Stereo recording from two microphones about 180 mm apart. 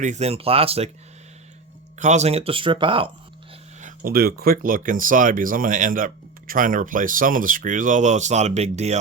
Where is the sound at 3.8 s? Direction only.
55° right (ahead or behind); by 8.9 s 40° right (ahead or behind).